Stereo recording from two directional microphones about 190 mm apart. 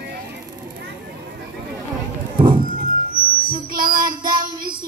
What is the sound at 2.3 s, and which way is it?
Music, 25° right (ahead or behind).